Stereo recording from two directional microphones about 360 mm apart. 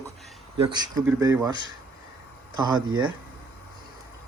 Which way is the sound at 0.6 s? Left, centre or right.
Centre.